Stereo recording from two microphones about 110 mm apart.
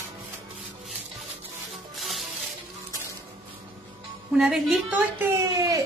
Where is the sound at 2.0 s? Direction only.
Centre (ahead or behind).